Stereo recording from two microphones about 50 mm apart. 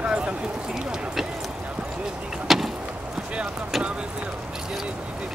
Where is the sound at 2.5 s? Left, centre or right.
Centre.